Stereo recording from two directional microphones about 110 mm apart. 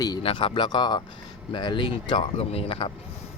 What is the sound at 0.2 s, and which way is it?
Speech, 55° left (ahead or behind).